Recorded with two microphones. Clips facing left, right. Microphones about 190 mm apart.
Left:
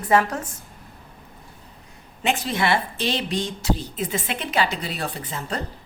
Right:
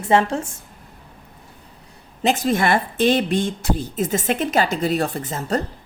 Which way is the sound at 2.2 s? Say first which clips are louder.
Right 4 dB; 45° right (ahead or behind).